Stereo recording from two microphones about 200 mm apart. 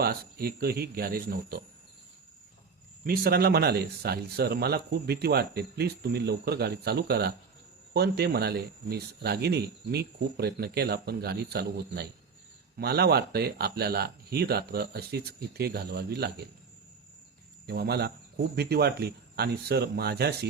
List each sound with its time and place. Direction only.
0.0 s speech: 50° right (ahead or behind)
3.0 s speech: 50° right (ahead or behind)
17.7 s speech: 55° right (ahead or behind)